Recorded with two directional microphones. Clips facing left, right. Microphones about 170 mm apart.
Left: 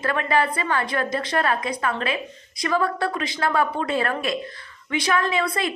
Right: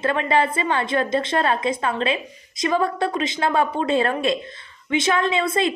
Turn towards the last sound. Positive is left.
turn(degrees=-25)  # may be behind; listen again after turning